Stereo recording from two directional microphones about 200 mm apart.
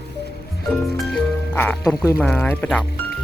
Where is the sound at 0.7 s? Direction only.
Centre (ahead or behind).